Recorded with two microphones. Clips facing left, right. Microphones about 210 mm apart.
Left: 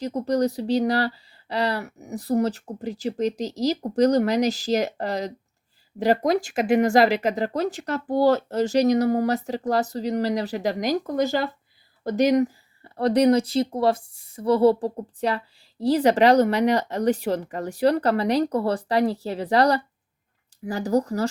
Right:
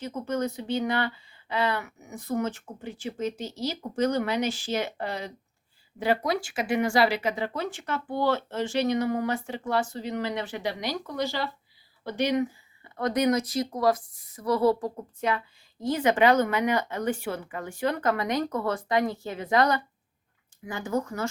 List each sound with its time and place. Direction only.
0.0 s speech: 35° left (ahead or behind)